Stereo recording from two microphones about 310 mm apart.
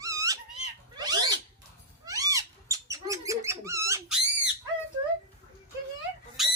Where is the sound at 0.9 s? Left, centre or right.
Centre.